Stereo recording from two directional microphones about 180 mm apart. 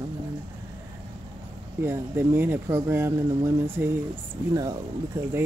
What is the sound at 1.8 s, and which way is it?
Speech, 15° right (ahead or behind).